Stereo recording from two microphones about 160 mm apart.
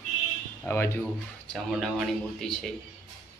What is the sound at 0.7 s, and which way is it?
Speech, 10° left (ahead or behind).